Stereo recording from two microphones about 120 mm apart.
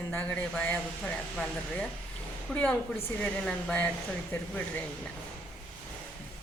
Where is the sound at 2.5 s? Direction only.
10° left (ahead or behind).